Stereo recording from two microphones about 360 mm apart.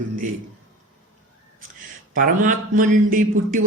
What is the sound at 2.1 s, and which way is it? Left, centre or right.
Speech, right.